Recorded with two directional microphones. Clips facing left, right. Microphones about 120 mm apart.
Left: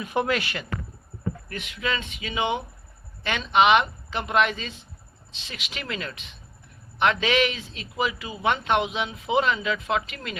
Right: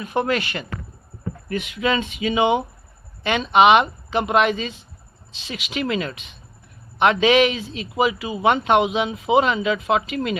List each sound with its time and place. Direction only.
0.0 s a woman's voice: 5° left (ahead or behind)
1.5 s speech: 15° right (ahead or behind)